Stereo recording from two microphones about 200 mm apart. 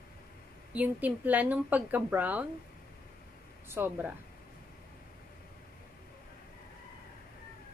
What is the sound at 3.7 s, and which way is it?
Speech, 10° right (ahead or behind).